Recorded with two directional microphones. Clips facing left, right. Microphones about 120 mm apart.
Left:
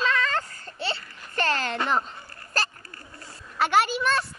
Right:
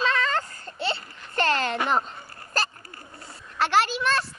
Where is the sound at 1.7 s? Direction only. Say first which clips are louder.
Right 1 dB; 20° right (ahead or behind).